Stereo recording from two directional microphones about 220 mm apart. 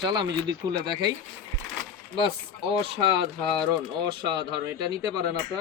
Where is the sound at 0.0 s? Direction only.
20° right (ahead or behind).